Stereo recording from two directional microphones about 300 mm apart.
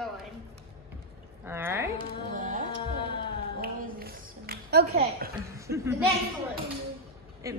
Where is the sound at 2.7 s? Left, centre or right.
Centre.